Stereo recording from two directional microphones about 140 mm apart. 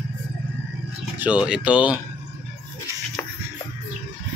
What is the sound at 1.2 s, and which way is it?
Speech, 5° right (ahead or behind).